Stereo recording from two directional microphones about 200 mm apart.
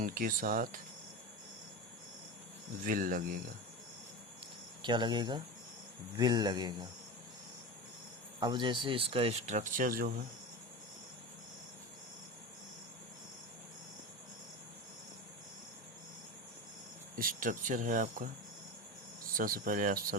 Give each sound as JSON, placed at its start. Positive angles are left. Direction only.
{"t": 0.0, "sound": "speech", "side_deg": -45}
{"t": 2.8, "sound": "speech", "side_deg": -45}
{"t": 4.8, "sound": "speech", "side_deg": -20}
{"t": 8.4, "sound": "speech", "side_deg": -20}
{"t": 17.2, "sound": "speech", "side_deg": -45}
{"t": 19.4, "sound": "speech", "side_deg": -45}